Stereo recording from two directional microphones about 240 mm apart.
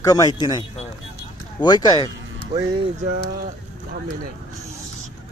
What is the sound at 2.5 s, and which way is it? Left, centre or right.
Speech, right.